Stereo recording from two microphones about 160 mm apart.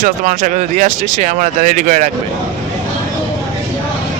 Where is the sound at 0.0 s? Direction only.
50° right (ahead or behind).